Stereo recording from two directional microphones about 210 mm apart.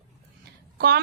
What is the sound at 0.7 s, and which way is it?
Speech, 50° right (ahead or behind).